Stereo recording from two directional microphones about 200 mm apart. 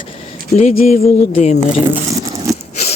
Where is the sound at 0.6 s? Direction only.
35° left (ahead or behind).